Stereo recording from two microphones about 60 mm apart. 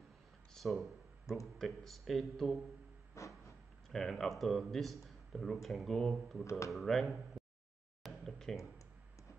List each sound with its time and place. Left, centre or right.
0.6 s speech: centre
1.3 s a man's voice: left
1.6 s speech: centre
3.2 s a sound: left
3.9 s speech: centre
8.0 s a sound: centre